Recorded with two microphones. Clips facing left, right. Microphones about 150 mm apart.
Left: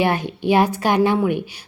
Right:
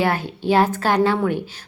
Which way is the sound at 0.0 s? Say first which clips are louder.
Left 1 dB; 20° left (ahead or behind).